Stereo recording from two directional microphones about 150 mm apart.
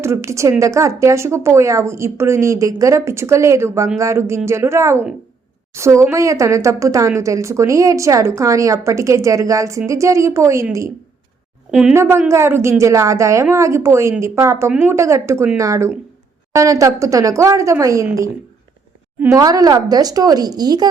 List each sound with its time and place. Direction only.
0.0 s speech: 20° right (ahead or behind)
11.7 s speech: 5° right (ahead or behind)
11.9 s speech: 15° right (ahead or behind)
19.3 s speech: 25° right (ahead or behind)